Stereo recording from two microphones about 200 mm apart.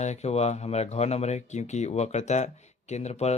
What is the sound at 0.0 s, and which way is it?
Speech, 35° left (ahead or behind).